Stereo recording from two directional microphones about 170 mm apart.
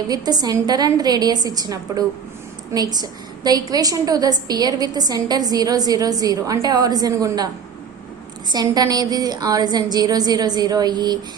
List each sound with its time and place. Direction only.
0.1 s a woman's voice: 25° right (ahead or behind)
8.5 s a woman's voice: 20° right (ahead or behind)